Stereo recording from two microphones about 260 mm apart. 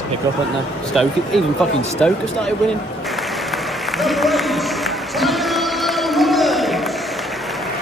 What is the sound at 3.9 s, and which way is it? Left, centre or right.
Applause, centre.